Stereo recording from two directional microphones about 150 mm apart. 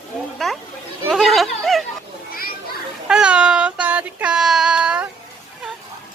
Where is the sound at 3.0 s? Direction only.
5° right (ahead or behind).